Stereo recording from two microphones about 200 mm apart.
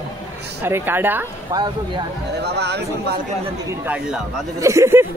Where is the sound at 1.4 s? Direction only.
20° right (ahead or behind).